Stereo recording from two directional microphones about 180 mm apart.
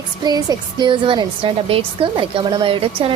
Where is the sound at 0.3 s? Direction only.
25° right (ahead or behind).